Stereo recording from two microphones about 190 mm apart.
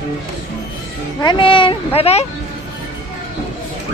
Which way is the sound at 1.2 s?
25° left (ahead or behind).